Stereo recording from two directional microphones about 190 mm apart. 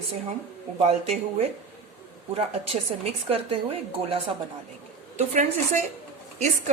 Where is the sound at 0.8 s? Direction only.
35° right (ahead or behind).